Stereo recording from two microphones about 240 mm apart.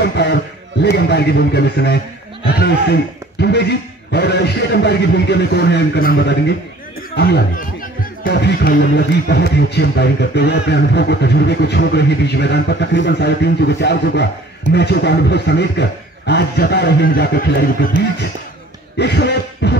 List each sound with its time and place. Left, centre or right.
0.0 s speech: left
18.9 s speech: left